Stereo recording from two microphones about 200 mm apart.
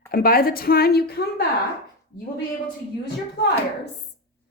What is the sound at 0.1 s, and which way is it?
A woman's voice, 45° left (ahead or behind).